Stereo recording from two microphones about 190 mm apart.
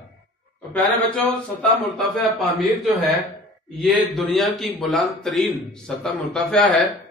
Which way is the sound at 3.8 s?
Centre (ahead or behind).